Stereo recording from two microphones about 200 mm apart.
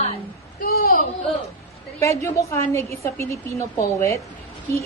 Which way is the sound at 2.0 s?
15° left (ahead or behind).